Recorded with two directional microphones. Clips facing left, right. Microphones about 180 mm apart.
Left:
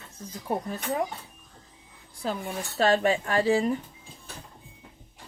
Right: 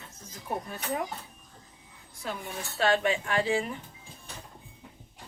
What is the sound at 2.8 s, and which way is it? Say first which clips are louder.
Speech: left 3 dB; 40° left (ahead or behind).